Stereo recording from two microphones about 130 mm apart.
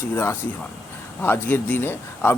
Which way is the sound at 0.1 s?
20° left (ahead or behind).